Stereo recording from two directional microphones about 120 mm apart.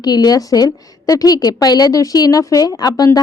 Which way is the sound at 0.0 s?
35° left (ahead or behind).